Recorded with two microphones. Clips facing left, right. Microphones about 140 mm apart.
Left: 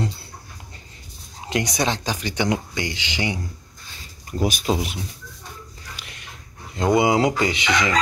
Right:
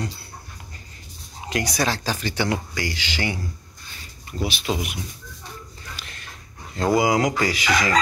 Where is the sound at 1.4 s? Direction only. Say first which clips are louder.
Left 1 dB; 20° left (ahead or behind).